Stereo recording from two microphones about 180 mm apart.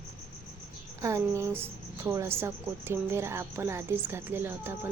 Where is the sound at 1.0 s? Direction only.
15° right (ahead or behind).